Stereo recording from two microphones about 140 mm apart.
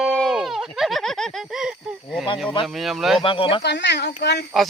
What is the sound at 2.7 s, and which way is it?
Speech, centre (ahead or behind).